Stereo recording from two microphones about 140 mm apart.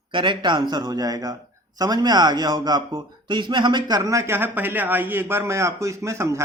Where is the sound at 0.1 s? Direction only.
35° right (ahead or behind).